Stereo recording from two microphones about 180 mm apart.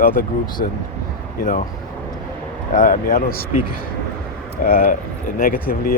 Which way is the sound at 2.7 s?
50° left (ahead or behind).